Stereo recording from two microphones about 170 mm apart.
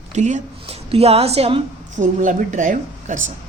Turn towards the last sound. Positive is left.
turn(degrees=-45)  # may be behind; listen again after turning